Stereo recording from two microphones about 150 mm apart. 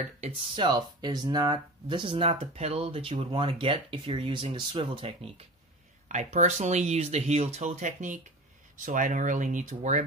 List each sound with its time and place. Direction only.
0.6 s speech: 30° right (ahead or behind)
6.0 s speech: 50° right (ahead or behind)